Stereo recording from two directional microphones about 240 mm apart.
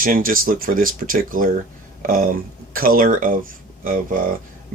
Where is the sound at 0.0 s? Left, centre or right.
Right.